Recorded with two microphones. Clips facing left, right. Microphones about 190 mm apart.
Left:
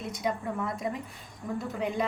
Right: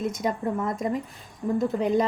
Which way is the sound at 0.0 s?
45° right (ahead or behind).